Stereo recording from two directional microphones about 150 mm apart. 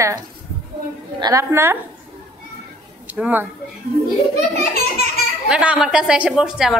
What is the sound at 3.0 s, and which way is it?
Speech, 10° right (ahead or behind).